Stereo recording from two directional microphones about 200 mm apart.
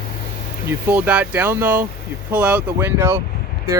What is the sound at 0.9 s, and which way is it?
Speech, 5° right (ahead or behind).